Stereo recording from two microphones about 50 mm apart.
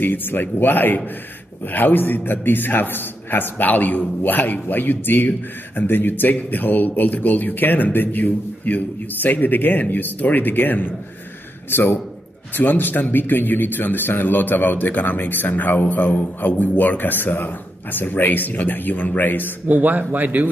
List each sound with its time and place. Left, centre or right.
0.0 s a man's voice: left
19.7 s speech: right